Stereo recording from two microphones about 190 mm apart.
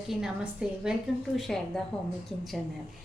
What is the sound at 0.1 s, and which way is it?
A woman's voice, centre (ahead or behind).